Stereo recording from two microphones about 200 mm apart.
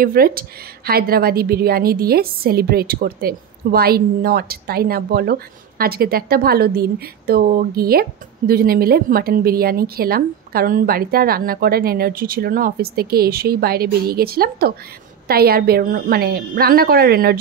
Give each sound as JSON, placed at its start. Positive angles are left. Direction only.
{"t": 0.0, "sound": "a woman's voice", "side_deg": -45}